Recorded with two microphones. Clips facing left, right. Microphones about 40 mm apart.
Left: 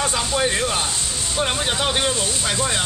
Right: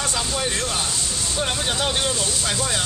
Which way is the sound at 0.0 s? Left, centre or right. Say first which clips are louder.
Left 4 dB; centre.